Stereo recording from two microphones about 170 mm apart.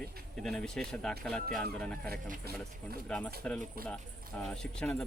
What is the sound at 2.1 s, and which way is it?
Speech, 60° right (ahead or behind).